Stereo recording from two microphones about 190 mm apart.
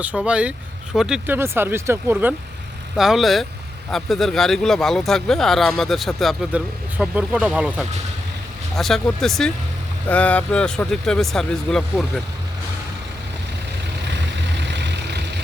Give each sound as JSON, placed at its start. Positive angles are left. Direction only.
{"t": 0.0, "sound": "speech", "side_deg": -5}
{"t": 3.0, "sound": "speech", "side_deg": 0}
{"t": 14.5, "sound": "vehicle", "side_deg": -65}